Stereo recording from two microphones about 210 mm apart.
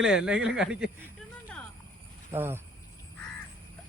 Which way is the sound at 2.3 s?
10° right (ahead or behind).